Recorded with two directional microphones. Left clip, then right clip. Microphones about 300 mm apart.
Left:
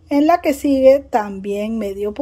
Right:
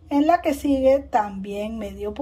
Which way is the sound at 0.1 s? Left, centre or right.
Centre.